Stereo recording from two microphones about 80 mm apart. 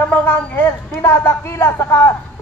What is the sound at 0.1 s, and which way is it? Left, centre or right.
A woman's voice, left.